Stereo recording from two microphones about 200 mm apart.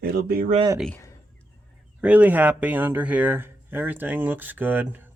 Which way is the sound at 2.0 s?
5° right (ahead or behind).